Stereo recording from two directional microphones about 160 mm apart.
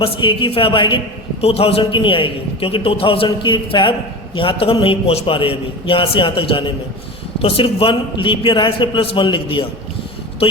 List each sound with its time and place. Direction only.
0.0 s a man's voice: 30° left (ahead or behind)